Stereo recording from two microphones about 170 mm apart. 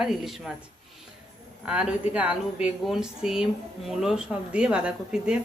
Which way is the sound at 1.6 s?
5° right (ahead or behind).